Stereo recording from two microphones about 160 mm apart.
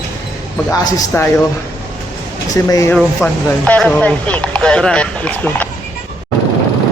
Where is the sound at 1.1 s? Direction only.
15° left (ahead or behind).